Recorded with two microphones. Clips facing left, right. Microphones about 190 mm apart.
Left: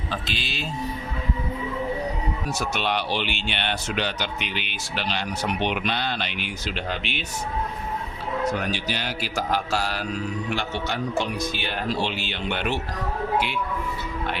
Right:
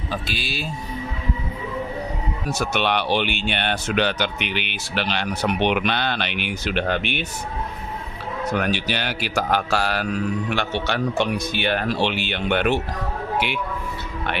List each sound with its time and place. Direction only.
0.1 s speech: 10° right (ahead or behind)
2.6 s speech: 65° right (ahead or behind)
8.5 s speech: 70° right (ahead or behind)